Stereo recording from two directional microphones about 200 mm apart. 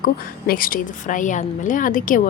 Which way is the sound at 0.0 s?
45° left (ahead or behind).